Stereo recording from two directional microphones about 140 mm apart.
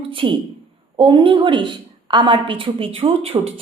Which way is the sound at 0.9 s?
40° right (ahead or behind).